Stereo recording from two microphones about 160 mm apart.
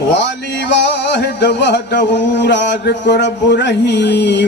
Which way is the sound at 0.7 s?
90° left.